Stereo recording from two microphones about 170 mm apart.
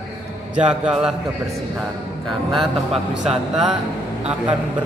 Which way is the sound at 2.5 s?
Centre (ahead or behind).